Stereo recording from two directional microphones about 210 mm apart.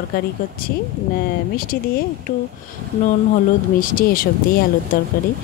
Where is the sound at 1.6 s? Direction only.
45° left (ahead or behind).